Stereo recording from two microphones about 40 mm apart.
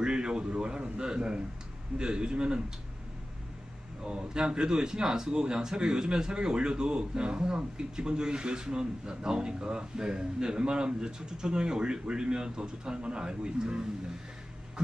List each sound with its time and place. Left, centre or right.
0.0 s a man's voice: centre
4.0 s a man's voice: right